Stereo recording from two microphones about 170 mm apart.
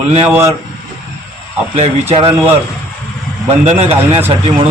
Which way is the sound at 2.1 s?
30° right (ahead or behind).